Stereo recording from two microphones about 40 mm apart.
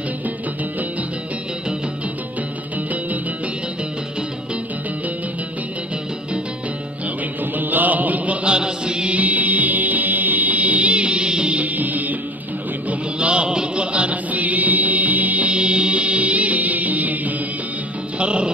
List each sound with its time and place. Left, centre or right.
7.5 s music: right
8.5 s chant: right
9.1 s music: right
11.5 s music: right
13.2 s music: right
18.2 s music: right